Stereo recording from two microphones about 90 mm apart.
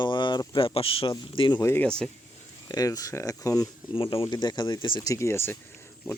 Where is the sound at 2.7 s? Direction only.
40° left (ahead or behind).